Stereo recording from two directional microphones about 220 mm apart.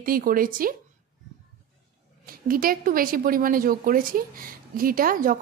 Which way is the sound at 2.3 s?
40° right (ahead or behind).